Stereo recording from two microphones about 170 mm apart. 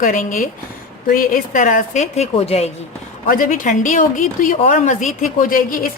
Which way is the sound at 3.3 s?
50° left (ahead or behind).